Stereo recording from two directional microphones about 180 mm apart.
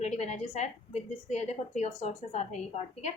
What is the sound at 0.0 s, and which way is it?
A woman's voice, 40° left (ahead or behind).